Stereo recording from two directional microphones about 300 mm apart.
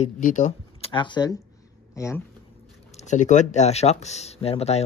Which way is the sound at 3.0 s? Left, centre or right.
Left.